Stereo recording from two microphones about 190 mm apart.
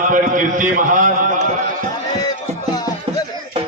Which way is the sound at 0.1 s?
45° right (ahead or behind).